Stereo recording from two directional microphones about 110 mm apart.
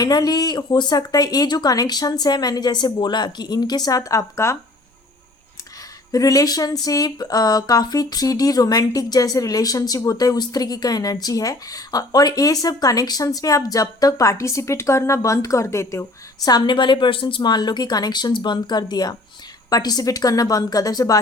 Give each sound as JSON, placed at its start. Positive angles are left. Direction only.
{"t": 0.0, "sound": "speech", "side_deg": 35}
{"t": 6.1, "sound": "speech", "side_deg": 30}